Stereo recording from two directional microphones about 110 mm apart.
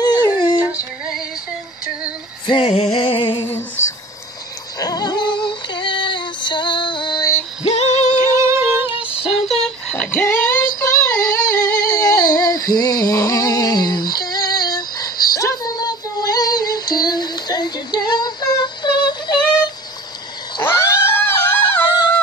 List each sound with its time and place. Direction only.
0.2 s a sound: 40° left (ahead or behind)
2.4 s music: 45° left (ahead or behind)
3.0 s a sound: 50° left (ahead or behind)
3.3 s female singing: 20° left (ahead or behind)
4.7 s female singing: 35° left (ahead or behind)
7.7 s female singing: 75° left (ahead or behind)
8.2 s music: 25° right (ahead or behind)
8.6 s female singing: 15° right (ahead or behind)
9.5 s female singing: 5° left (ahead or behind); by 19.4 s 40° left (ahead or behind)
20.6 s cat: 25° left (ahead or behind)
21.2 s music: 20° left (ahead or behind)